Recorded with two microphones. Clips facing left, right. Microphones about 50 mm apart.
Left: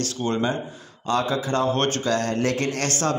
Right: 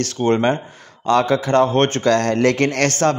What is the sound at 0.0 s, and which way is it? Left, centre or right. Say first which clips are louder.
A man's voice: right 7 dB; right.